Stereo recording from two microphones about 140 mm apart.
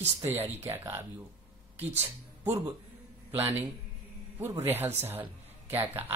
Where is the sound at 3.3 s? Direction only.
15° right (ahead or behind).